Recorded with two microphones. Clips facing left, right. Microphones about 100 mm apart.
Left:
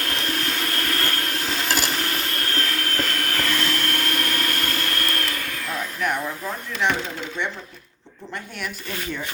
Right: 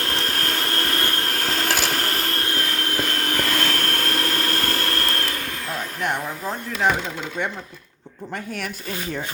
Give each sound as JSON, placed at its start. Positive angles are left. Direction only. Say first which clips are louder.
{"t": 0.0, "sound": "vehicle", "louder": "right 1 dB", "side_deg": -40}
{"t": 1.3, "sound": "a sound", "louder": "right 2 dB", "side_deg": -50}
{"t": 2.4, "sound": "a sound", "louder": "even", "side_deg": -25}
{"t": 3.2, "sound": "vacuum cleaner", "louder": "right 1 dB", "side_deg": -30}
{"t": 3.6, "sound": "vacuum cleaner", "louder": "right 1 dB", "side_deg": -45}
{"t": 6.8, "sound": "speech", "louder": "right 2 dB", "side_deg": -40}